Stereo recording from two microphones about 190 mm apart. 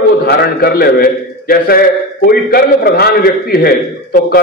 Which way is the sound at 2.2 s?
55° left (ahead or behind).